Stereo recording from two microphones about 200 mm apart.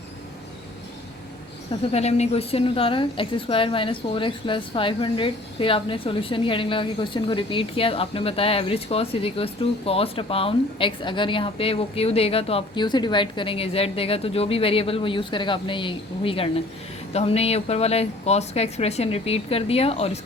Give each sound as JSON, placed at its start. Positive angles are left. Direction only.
{"t": 1.9, "sound": "a woman's voice", "side_deg": 30}